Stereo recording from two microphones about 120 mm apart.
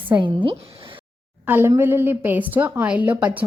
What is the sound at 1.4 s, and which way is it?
A woman's voice, 15° right (ahead or behind).